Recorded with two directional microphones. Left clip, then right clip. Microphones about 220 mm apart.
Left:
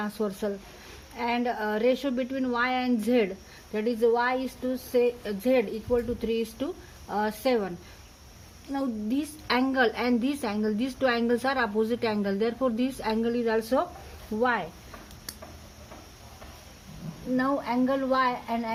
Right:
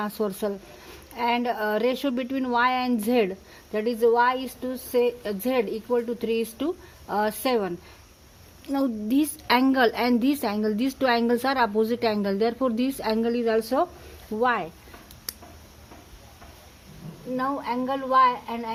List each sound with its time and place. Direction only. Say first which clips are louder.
0.0 s a woman's voice: right 3 dB; 40° right (ahead or behind)
8.7 s a woman's voice: right 5 dB; 45° right (ahead or behind)
17.3 s a woman's voice: even; 30° right (ahead or behind)